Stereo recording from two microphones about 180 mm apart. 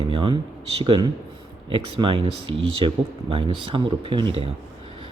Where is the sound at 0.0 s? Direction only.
30° right (ahead or behind).